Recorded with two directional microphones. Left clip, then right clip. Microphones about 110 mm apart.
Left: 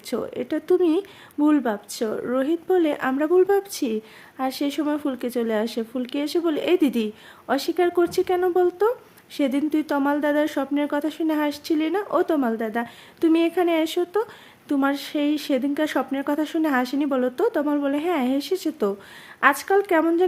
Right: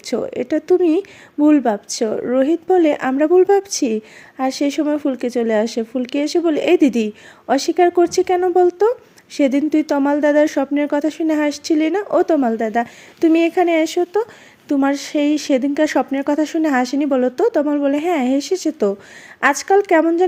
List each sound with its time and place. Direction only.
0.0 s speech: 30° right (ahead or behind)